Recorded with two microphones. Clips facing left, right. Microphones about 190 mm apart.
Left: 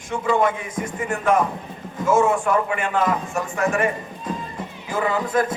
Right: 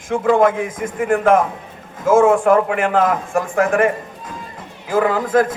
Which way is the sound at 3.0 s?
55° right (ahead or behind).